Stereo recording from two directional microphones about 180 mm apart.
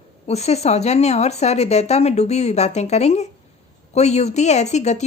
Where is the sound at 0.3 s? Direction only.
35° left (ahead or behind).